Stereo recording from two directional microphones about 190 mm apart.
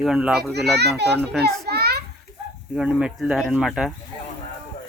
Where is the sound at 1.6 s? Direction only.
55° right (ahead or behind).